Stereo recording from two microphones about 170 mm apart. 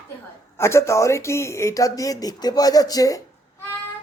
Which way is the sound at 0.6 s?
15° left (ahead or behind).